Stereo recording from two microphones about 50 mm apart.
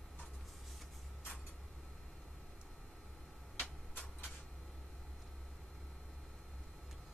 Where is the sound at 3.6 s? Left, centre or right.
Left.